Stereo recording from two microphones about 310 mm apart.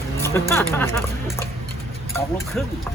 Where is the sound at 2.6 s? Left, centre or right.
Centre.